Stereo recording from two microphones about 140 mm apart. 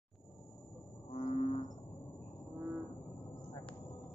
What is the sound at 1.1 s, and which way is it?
Cattle, 50° left (ahead or behind).